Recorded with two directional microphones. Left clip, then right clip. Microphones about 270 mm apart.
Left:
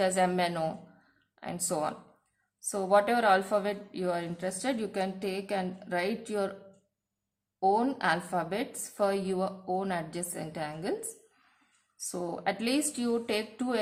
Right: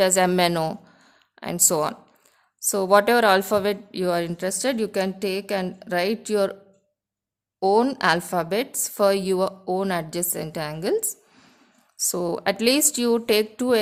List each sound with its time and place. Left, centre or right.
0.0 s a woman's voice: right
7.6 s a woman's voice: right
11.9 s a woman's voice: right